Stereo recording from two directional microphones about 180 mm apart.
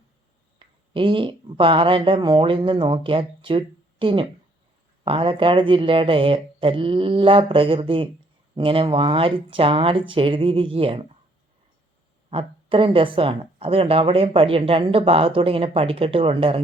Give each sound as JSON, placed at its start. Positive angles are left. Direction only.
{"t": 0.6, "sound": "speech", "side_deg": -30}
{"t": 12.3, "sound": "speech", "side_deg": -30}